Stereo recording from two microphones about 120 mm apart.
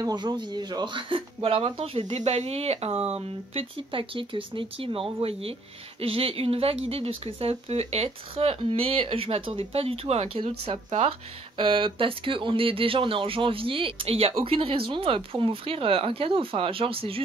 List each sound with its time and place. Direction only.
0.0 s speech: 35° right (ahead or behind); by 2.1 s 50° right (ahead or behind)
2.1 s speech: 65° right (ahead or behind)
10.9 s speech: 60° right (ahead or behind)
11.5 s speech: 45° right (ahead or behind)